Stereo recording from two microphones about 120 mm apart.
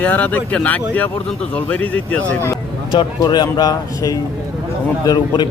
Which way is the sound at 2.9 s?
40° left (ahead or behind).